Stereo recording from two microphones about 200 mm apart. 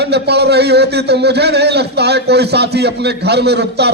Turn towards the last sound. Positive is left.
turn(degrees=-55)  # may be behind; listen again after turning